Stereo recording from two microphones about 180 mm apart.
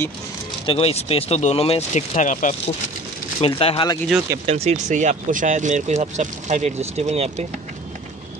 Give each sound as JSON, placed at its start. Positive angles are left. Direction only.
{"t": 0.7, "sound": "speech", "side_deg": 35}
{"t": 3.3, "sound": "speech", "side_deg": 30}
{"t": 4.5, "sound": "speech", "side_deg": -35}